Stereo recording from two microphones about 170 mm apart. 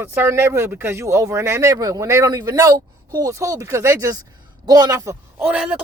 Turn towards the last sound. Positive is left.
turn(degrees=-5)  # may be behind; listen again after turning